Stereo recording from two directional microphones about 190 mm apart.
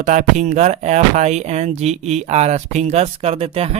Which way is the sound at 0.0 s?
40° right (ahead or behind).